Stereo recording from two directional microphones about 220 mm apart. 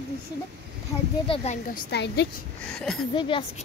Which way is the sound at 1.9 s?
50° left (ahead or behind).